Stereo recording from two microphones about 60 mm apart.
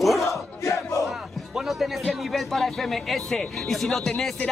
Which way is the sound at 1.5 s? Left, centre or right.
Centre.